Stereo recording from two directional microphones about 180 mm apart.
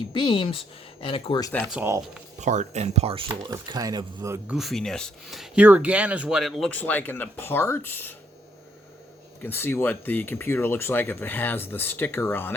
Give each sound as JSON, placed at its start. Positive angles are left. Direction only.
{"t": 0.1, "sound": "speech", "side_deg": 25}
{"t": 1.4, "sound": "speech", "side_deg": 15}
{"t": 1.7, "sound": "speech", "side_deg": -10}
{"t": 2.4, "sound": "speech", "side_deg": -40}
{"t": 3.4, "sound": "speech", "side_deg": -20}
{"t": 4.4, "sound": "speech", "side_deg": 0}
{"t": 9.4, "sound": "speech", "side_deg": 10}